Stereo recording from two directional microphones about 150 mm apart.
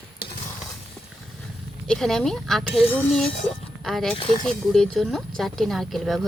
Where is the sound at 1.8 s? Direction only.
5° left (ahead or behind).